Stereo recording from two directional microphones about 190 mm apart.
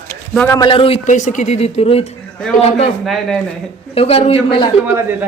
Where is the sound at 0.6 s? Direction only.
25° left (ahead or behind).